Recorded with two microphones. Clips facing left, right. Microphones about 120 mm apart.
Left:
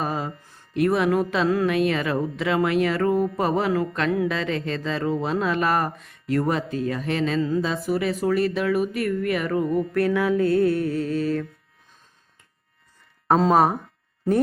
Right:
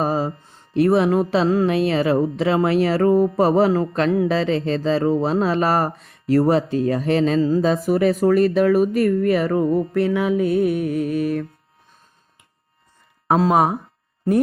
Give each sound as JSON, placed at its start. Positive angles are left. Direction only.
{"t": 0.0, "sound": "music", "side_deg": -35}
{"t": 13.2, "sound": "speech", "side_deg": -10}